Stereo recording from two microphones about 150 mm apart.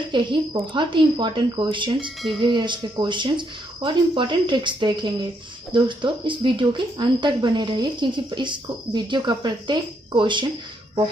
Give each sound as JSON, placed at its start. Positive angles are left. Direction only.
{"t": 0.1, "sound": "speech", "side_deg": -30}